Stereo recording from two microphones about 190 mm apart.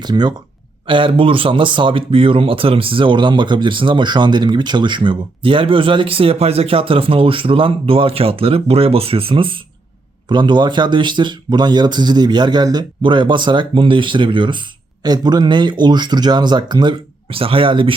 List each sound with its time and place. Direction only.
0.0 s speech: 20° right (ahead or behind)